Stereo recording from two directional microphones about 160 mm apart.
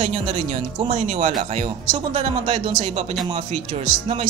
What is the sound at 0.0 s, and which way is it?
Speech, 35° right (ahead or behind).